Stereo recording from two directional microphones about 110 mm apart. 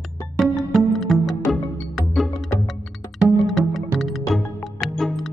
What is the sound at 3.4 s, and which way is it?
Music, centre (ahead or behind).